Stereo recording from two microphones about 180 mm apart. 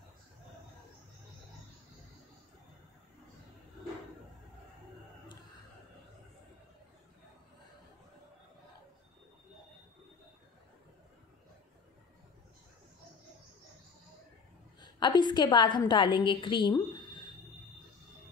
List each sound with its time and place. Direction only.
14.8 s a woman's voice: 25° left (ahead or behind)